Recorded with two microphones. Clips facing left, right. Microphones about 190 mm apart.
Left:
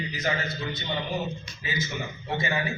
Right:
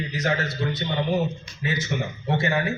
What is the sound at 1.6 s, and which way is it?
Speech, 70° right (ahead or behind).